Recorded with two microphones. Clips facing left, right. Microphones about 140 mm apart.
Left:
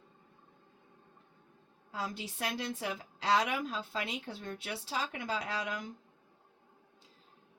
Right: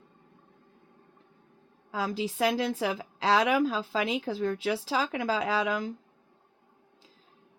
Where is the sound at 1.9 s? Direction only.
90° right.